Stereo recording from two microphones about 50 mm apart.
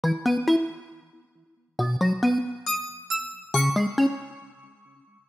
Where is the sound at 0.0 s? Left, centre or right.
Centre.